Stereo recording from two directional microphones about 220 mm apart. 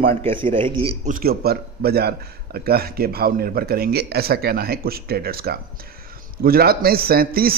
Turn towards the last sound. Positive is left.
turn(degrees=-40)  # may be behind; listen again after turning